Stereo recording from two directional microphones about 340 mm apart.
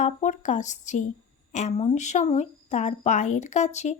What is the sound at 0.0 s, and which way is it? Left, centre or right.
Speech, left.